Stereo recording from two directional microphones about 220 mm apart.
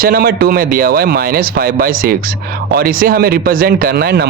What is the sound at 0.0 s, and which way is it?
Speech, 40° right (ahead or behind).